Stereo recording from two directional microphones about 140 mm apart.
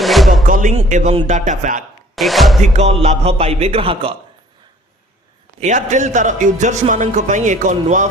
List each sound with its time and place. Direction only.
0.0 s music: centre (ahead or behind)
0.4 s music: 70° right (ahead or behind)
0.9 s speech: 60° right (ahead or behind)
2.1 s speech: centre (ahead or behind)
2.7 s speech: 50° right (ahead or behind)
5.5 s speech: 60° right (ahead or behind)